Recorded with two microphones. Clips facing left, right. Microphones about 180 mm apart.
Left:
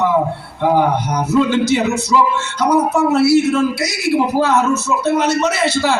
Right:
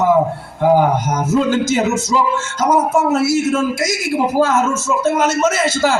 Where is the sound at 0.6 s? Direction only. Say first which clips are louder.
Right 2 dB; 45° right (ahead or behind).